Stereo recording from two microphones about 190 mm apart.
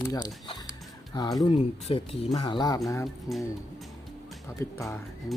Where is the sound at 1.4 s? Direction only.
30° left (ahead or behind).